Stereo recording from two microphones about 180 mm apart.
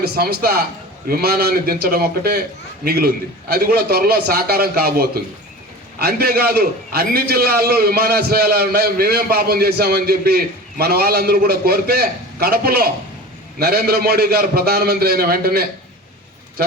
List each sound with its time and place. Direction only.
0.0 s a man's voice: 60° right (ahead or behind)